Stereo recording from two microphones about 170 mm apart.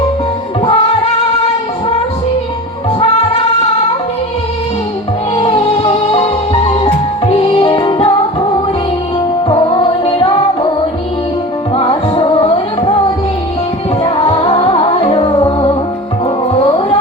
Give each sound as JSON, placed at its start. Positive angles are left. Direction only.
{"t": 0.6, "sound": "music", "side_deg": 35}
{"t": 5.4, "sound": "music", "side_deg": 35}
{"t": 9.5, "sound": "music", "side_deg": 30}
{"t": 11.7, "sound": "music", "side_deg": 30}
{"t": 14.0, "sound": "music", "side_deg": 30}